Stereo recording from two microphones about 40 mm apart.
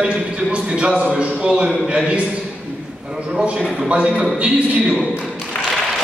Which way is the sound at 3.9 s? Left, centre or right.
Right.